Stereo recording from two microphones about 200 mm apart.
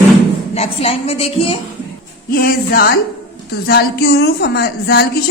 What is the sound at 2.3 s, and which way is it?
Speech, 50° left (ahead or behind).